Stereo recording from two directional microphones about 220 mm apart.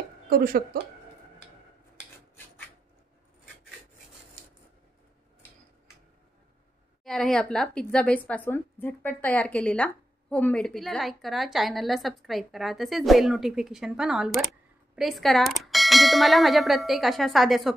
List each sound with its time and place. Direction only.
0.3 s speech: 40° right (ahead or behind)
7.1 s speech: centre (ahead or behind)